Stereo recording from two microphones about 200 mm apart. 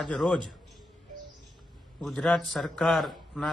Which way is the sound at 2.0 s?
5° left (ahead or behind).